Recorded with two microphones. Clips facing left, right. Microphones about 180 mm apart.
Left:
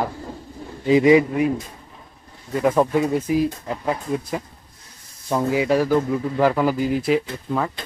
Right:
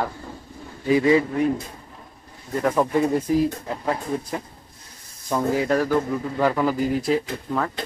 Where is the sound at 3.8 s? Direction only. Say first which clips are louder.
Left 1 dB; 10° left (ahead or behind).